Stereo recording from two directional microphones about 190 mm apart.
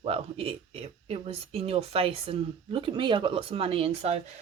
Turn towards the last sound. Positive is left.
turn(degrees=-30)  # may be behind; listen again after turning